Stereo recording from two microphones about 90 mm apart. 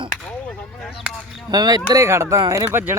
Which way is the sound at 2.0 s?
30° right (ahead or behind).